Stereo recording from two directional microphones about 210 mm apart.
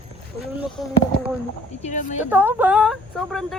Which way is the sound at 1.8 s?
35° left (ahead or behind).